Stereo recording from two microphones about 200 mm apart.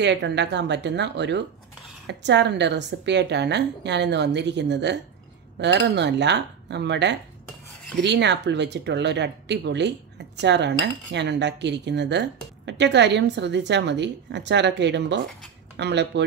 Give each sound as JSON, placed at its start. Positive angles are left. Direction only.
{"t": 0.0, "sound": "speech", "side_deg": -60}